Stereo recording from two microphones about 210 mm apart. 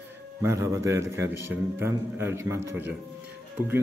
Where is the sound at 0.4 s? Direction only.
15° right (ahead or behind).